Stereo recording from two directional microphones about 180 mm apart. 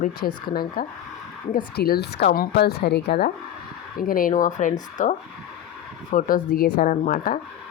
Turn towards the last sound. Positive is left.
turn(degrees=50)  # may be behind; listen again after turning